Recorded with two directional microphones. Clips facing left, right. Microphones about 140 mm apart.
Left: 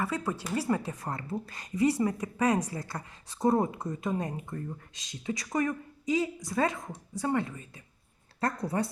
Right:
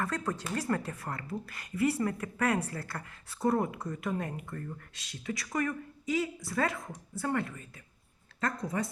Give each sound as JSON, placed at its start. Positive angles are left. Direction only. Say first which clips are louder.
{"t": 0.0, "sound": "a woman's voice", "louder": "left 2 dB", "side_deg": 10}
{"t": 8.4, "sound": "speech", "louder": "left 3 dB", "side_deg": 35}